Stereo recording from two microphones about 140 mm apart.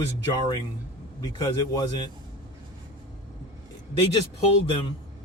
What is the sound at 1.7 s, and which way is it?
Speech, 30° left (ahead or behind).